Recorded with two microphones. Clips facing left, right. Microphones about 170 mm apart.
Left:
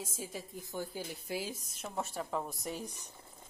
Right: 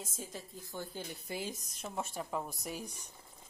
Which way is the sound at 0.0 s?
5° left (ahead or behind).